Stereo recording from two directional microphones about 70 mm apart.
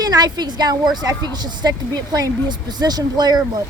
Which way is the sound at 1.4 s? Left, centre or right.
Right.